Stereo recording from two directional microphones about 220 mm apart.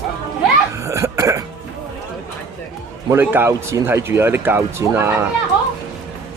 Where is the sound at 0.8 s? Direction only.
15° right (ahead or behind).